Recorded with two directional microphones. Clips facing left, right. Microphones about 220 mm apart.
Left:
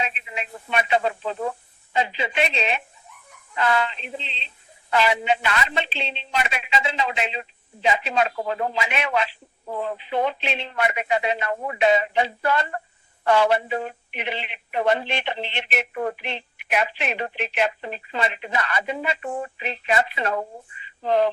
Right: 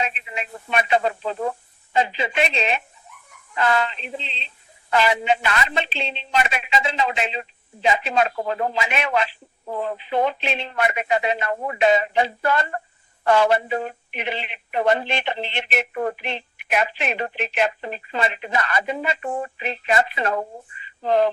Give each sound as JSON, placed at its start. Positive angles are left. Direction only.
{"t": 0.3, "sound": "speech", "side_deg": -45}